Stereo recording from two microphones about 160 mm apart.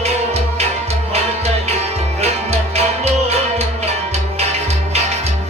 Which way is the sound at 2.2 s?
40° right (ahead or behind).